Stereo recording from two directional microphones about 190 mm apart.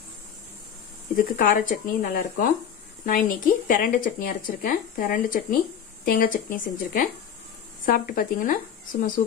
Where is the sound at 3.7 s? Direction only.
45° left (ahead or behind).